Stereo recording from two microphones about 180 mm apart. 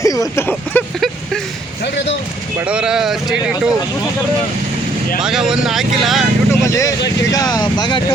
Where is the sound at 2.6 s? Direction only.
5° right (ahead or behind).